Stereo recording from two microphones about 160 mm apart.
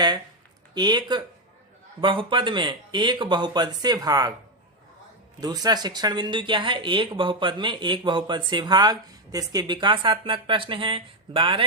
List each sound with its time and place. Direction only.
0.7 s speech: 25° right (ahead or behind)
5.4 s speech: 25° right (ahead or behind)